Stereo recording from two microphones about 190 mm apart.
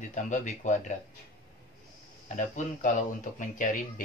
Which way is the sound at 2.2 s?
40° left (ahead or behind).